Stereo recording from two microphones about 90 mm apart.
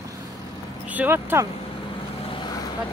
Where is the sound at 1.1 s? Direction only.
30° right (ahead or behind).